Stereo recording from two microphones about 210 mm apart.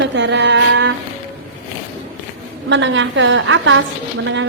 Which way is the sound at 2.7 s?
60° right (ahead or behind).